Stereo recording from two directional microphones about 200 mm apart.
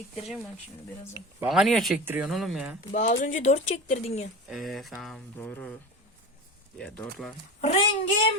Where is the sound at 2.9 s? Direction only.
35° left (ahead or behind).